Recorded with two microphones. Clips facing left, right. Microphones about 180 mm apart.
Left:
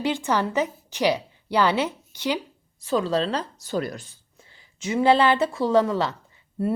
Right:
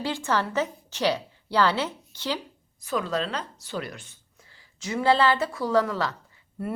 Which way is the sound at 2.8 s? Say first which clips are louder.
Left 5 dB; 30° left (ahead or behind).